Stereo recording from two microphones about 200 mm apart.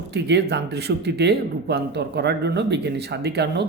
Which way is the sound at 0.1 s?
60° right (ahead or behind).